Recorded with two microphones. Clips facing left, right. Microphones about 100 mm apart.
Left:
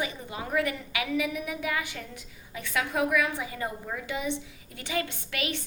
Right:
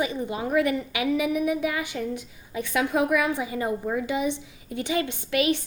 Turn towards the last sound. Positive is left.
turn(degrees=-20)  # may be behind; listen again after turning